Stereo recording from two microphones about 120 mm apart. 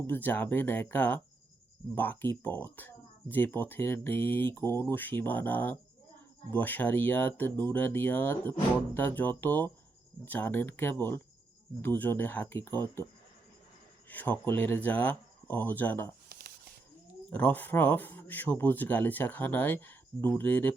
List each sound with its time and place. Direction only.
0.1 s speech: 15° left (ahead or behind)
14.1 s speech: 15° left (ahead or behind)
17.3 s speech: 15° left (ahead or behind)